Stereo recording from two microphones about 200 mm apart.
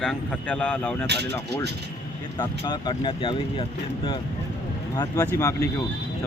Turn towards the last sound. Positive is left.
turn(degrees=15)  # may be behind; listen again after turning